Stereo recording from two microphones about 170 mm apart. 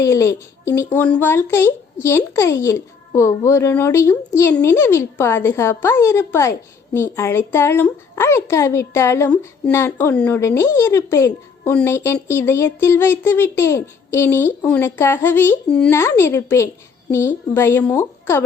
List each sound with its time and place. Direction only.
0.0 s a woman's voice: 15° left (ahead or behind)